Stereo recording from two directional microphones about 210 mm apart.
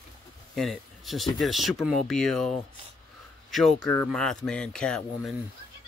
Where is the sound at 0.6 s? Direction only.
Centre (ahead or behind).